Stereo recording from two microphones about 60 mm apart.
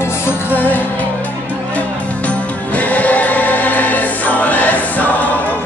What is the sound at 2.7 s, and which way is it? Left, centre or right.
Choir, left.